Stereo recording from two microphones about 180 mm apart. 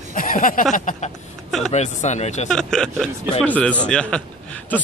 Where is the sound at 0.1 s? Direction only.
50° left (ahead or behind).